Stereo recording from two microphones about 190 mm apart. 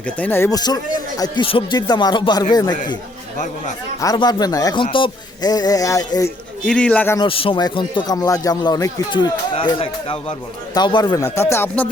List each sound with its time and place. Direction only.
0.2 s speech: 10° left (ahead or behind)
4.0 s speech: 20° left (ahead or behind)
6.7 s speech: 5° left (ahead or behind)
7.2 s speech: 30° left (ahead or behind); by 11.9 s 10° left (ahead or behind)